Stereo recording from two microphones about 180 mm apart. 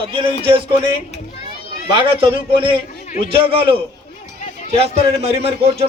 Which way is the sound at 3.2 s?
30° right (ahead or behind).